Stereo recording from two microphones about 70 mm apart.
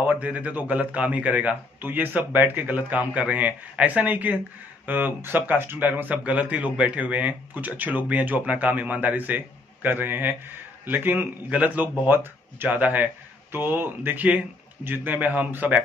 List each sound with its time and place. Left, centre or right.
0.0 s speech: right